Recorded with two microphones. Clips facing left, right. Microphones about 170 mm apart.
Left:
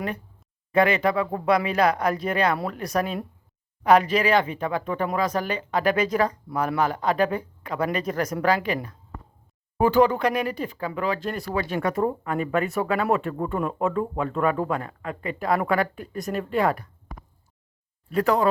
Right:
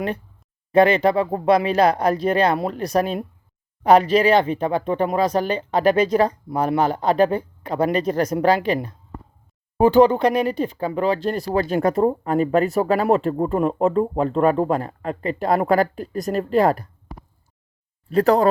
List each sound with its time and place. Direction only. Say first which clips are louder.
0.7 s speech: right 5 dB; 30° right (ahead or behind)
18.1 s speech: right 5 dB; 35° right (ahead or behind)